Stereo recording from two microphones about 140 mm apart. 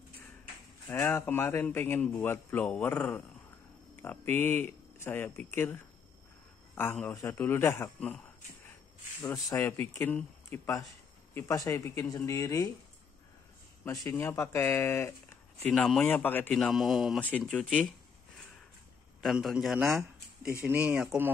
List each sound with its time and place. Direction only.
0.9 s speech: 15° left (ahead or behind)
9.2 s speech: 20° left (ahead or behind)
14.2 s speech: 20° left (ahead or behind)
15.7 s speech: 5° left (ahead or behind)
16.5 s a man's voice: centre (ahead or behind)
19.2 s a man's voice: 5° right (ahead or behind)
20.6 s speech: 10° right (ahead or behind)